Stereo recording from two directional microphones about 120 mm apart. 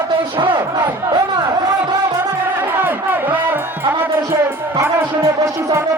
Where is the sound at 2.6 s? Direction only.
15° right (ahead or behind).